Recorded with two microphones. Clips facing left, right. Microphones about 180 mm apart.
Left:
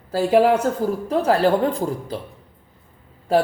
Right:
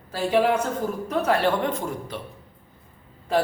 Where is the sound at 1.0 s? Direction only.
30° left (ahead or behind).